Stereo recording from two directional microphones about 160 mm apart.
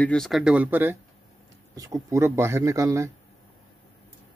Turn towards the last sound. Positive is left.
turn(degrees=-20)  # may be behind; listen again after turning